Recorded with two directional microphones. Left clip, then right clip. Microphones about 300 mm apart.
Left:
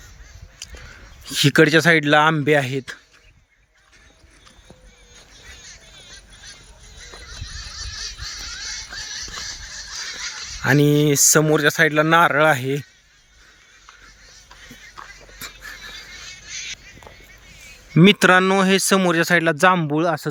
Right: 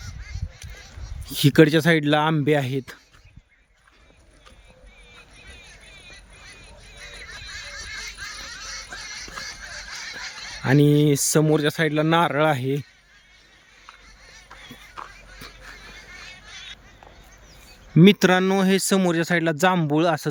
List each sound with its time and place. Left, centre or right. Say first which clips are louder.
0.6 s crow: left 9 dB; centre
1.3 s speech: left 2 dB; centre
10.6 s speech: left 2 dB; centre
14.9 s music: right 1 dB; centre
16.1 s music: left 4 dB; right
17.9 s speech: left 4 dB; centre